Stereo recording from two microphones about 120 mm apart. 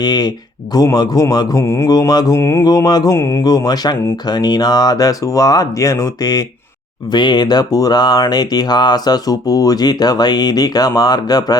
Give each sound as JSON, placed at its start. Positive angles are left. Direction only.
{"t": 0.0, "sound": "speech", "side_deg": 35}